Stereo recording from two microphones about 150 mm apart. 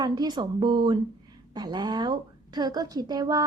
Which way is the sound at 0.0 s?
30° right (ahead or behind).